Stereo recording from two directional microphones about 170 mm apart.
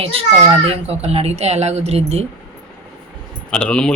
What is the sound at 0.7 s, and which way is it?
Speech, 35° right (ahead or behind).